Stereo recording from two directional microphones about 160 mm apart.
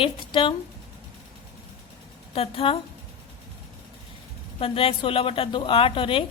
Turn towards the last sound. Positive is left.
turn(degrees=35)  # may be behind; listen again after turning